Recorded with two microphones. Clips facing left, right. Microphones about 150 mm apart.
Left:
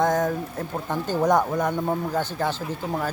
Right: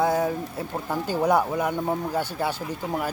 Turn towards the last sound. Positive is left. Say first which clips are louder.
# left 1 dB
turn(degrees=-10)  # may be behind; listen again after turning